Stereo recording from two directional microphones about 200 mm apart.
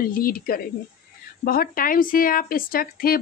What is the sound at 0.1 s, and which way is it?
Speech, 45° left (ahead or behind).